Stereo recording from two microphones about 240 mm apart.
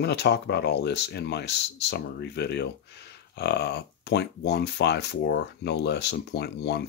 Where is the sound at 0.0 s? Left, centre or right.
Left.